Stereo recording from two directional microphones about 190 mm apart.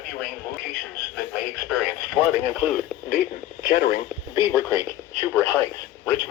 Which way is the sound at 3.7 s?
45° left (ahead or behind).